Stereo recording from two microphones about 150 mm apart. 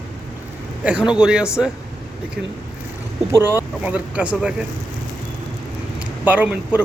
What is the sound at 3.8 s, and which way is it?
Speech, 10° right (ahead or behind).